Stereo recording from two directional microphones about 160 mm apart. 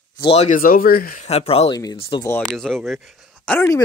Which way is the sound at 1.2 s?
40° left (ahead or behind).